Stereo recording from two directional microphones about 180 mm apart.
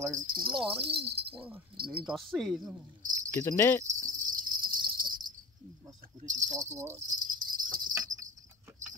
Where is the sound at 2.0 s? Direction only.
Centre (ahead or behind).